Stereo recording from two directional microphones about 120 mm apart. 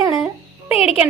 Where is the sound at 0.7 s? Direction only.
55° left (ahead or behind).